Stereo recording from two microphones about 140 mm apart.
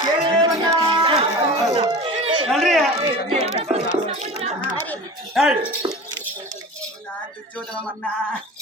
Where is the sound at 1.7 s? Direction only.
40° right (ahead or behind).